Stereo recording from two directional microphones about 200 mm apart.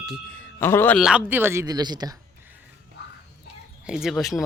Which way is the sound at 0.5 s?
10° left (ahead or behind).